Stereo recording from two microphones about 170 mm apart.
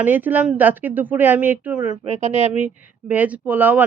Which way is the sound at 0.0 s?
10° right (ahead or behind).